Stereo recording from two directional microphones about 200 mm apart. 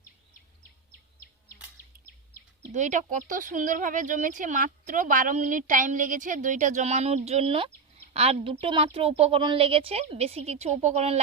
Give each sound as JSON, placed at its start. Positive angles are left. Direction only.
{"t": 2.7, "sound": "a woman's voice", "side_deg": -40}